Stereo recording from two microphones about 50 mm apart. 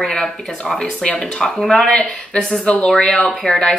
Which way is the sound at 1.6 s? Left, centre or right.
Centre.